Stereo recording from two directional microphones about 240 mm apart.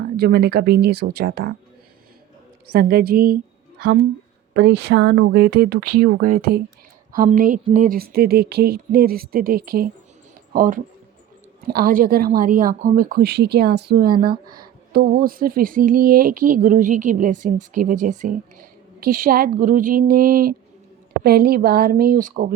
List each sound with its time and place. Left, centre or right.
0.2 s speech: right
2.6 s a woman's voice: right